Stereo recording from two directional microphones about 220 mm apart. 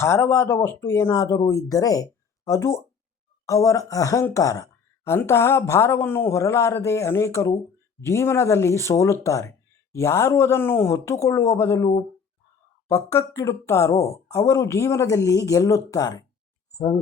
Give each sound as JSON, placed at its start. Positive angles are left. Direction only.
{"t": 0.0, "sound": "speech", "side_deg": 10}